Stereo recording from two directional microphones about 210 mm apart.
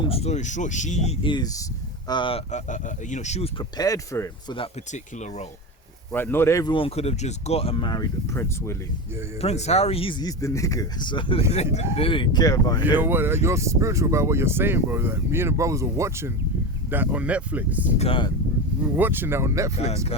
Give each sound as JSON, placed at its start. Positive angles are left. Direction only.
{"t": 0.0, "sound": "speech", "side_deg": 30}
{"t": 3.8, "sound": "speech", "side_deg": 15}
{"t": 4.5, "sound": "speech", "side_deg": 30}
{"t": 6.1, "sound": "speech", "side_deg": 10}
{"t": 9.4, "sound": "speech", "side_deg": 30}
{"t": 13.0, "sound": "speech", "side_deg": -10}
{"t": 17.9, "sound": "speech", "side_deg": 25}
{"t": 18.8, "sound": "speech", "side_deg": -10}
{"t": 19.7, "sound": "speech", "side_deg": 30}